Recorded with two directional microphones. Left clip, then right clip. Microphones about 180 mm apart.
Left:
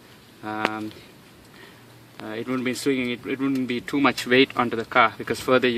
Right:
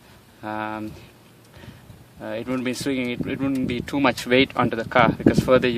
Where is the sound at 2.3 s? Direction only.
50° right (ahead or behind).